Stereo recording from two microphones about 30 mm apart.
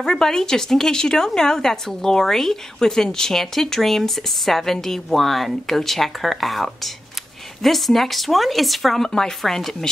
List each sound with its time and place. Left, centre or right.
0.0 s speech: left